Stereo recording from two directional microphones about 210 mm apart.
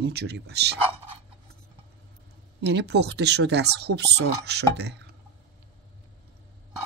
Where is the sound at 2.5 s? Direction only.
55° right (ahead or behind).